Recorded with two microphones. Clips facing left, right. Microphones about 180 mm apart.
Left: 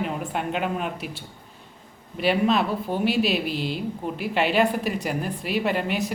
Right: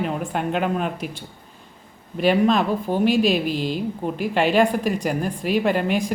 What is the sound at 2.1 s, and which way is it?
A woman's voice, 45° right (ahead or behind).